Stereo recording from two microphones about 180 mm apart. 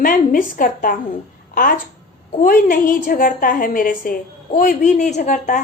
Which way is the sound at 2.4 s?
50° left (ahead or behind).